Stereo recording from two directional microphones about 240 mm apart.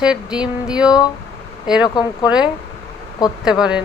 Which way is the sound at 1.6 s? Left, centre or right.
Centre.